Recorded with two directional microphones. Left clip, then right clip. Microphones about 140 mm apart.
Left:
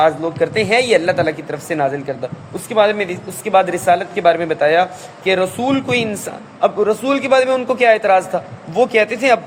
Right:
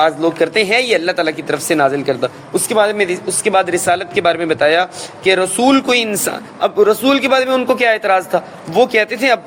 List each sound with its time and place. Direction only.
0.0 s speech: 30° right (ahead or behind)